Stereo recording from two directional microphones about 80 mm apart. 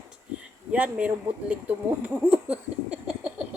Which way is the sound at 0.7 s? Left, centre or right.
Centre.